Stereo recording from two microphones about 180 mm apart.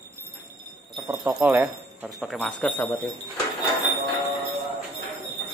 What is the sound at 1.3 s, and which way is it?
Speech, 5° right (ahead or behind).